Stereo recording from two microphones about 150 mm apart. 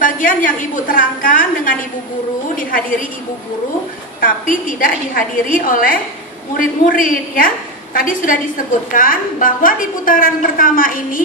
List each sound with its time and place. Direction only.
0.0 s a woman's voice: 65° left (ahead or behind)
4.2 s a woman's voice: 65° left (ahead or behind)